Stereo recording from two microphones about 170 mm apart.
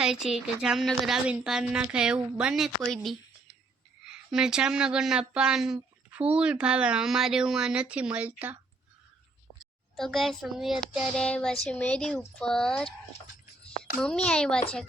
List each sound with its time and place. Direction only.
0.0 s speech: centre (ahead or behind)
9.9 s speech: centre (ahead or behind)
14.3 s speech: 5° left (ahead or behind)